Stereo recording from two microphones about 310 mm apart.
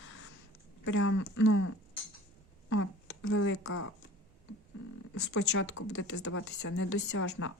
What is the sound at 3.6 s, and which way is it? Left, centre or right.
Speech, left.